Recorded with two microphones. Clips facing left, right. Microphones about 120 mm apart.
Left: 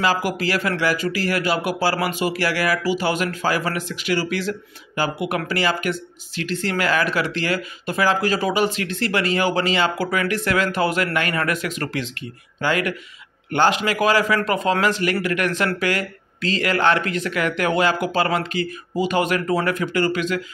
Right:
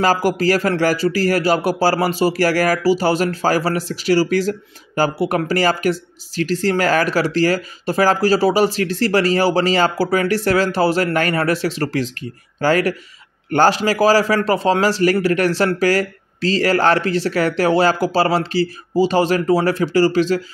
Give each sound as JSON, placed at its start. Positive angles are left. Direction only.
{"t": 0.0, "sound": "speech", "side_deg": -40}